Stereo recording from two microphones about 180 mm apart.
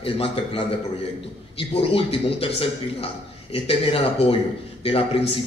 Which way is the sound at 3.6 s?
30° left (ahead or behind).